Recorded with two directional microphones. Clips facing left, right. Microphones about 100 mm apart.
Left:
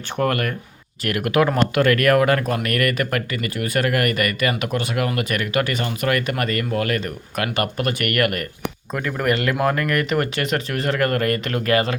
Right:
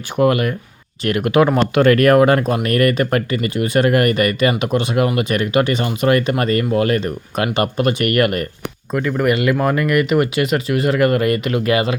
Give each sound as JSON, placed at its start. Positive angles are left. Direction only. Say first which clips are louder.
{"t": 0.2, "sound": "speech", "louder": "right 6 dB", "side_deg": -15}
{"t": 8.9, "sound": "speech", "louder": "right 5 dB", "side_deg": 0}